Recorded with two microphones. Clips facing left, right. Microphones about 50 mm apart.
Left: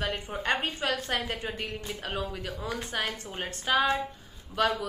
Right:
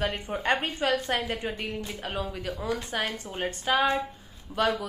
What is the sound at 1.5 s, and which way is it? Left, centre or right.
Speech, centre.